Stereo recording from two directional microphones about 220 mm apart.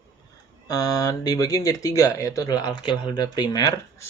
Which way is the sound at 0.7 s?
15° left (ahead or behind).